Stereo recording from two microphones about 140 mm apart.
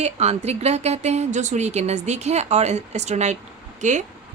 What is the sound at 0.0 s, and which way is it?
A woman's voice, 50° right (ahead or behind).